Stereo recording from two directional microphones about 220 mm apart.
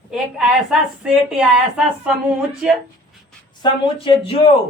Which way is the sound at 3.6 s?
25° left (ahead or behind).